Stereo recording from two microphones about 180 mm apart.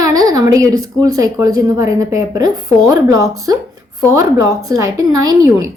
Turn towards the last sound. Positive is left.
turn(degrees=-20)  # may be behind; listen again after turning